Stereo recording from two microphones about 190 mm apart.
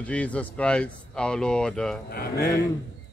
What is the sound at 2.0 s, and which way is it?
Speech, 55° left (ahead or behind).